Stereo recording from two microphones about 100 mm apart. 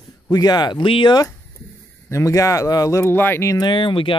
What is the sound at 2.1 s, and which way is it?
Speech, 30° left (ahead or behind).